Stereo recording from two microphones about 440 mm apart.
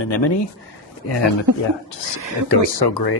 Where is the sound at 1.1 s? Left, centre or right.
Left.